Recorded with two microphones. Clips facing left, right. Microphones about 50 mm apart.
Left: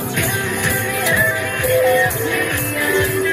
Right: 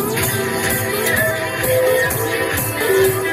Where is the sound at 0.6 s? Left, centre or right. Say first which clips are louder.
Even; centre.